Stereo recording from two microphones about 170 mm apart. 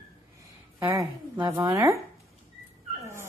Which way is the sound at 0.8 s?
15° right (ahead or behind).